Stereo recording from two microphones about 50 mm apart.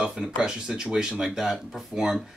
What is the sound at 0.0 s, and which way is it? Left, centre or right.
Speech, centre.